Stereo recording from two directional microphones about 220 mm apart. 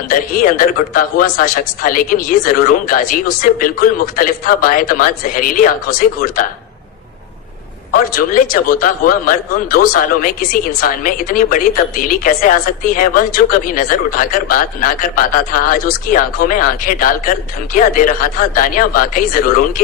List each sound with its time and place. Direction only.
0.1 s speech: 40° left (ahead or behind)
8.1 s speech: 40° left (ahead or behind)